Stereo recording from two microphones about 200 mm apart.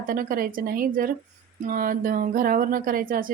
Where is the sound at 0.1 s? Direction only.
45° right (ahead or behind).